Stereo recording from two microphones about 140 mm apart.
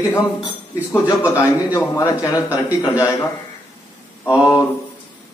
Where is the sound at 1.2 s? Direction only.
20° left (ahead or behind).